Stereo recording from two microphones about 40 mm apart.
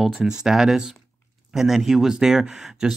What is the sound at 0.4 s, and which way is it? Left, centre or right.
Speech, centre.